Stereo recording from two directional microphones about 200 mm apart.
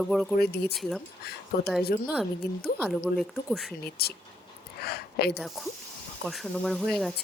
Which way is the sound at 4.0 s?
50° left (ahead or behind).